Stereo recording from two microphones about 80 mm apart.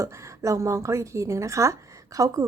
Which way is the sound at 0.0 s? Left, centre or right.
Right.